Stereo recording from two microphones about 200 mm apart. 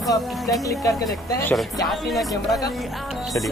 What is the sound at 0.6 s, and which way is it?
Speech, 15° left (ahead or behind).